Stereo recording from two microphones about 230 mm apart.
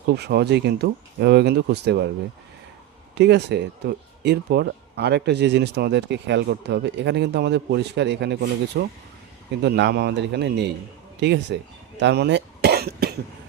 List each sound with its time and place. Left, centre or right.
0.2 s speech: right
3.2 s speech: right